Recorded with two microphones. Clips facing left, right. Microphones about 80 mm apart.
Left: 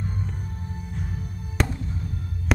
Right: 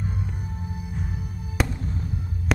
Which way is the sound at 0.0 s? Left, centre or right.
Centre.